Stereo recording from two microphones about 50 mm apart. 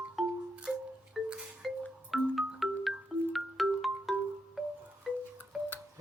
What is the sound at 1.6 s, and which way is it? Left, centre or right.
Music, centre.